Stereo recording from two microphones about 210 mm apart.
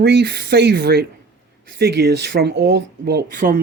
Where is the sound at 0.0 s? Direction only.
55° right (ahead or behind).